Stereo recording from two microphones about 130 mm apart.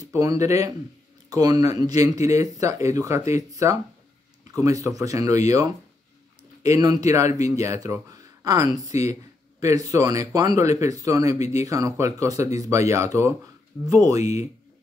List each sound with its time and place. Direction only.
0.0 s speech: 25° right (ahead or behind)
6.6 s speech: 30° right (ahead or behind)